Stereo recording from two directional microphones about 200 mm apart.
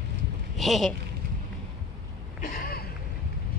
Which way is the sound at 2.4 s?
45° left (ahead or behind).